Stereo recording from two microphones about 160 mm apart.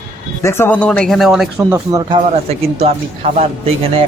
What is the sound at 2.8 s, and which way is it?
Speech, 40° right (ahead or behind).